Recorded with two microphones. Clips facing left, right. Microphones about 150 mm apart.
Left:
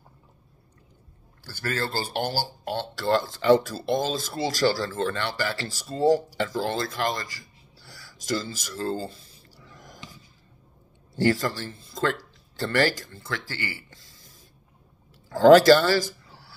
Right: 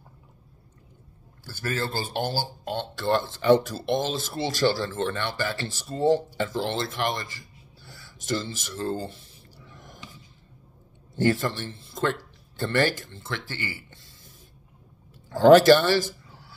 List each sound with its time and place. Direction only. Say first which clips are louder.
1.4 s speech: even; 20° right (ahead or behind)
7.8 s a sound: even; 20° right (ahead or behind)
8.3 s speech: even; 20° right (ahead or behind)
9.7 s snort: left 1 dB; 25° right (ahead or behind)
11.1 s speech: even; 20° right (ahead or behind)
15.2 s speech: even; 20° right (ahead or behind)